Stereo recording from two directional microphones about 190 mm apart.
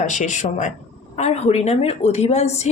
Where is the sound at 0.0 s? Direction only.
40° left (ahead or behind).